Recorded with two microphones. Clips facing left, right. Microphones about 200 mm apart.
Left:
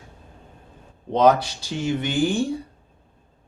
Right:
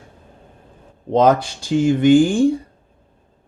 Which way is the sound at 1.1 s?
50° right (ahead or behind).